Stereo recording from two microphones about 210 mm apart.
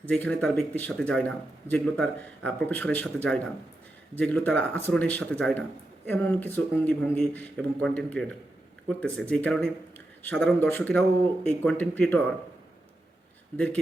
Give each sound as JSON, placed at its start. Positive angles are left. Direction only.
{"t": 0.1, "sound": "speech", "side_deg": 5}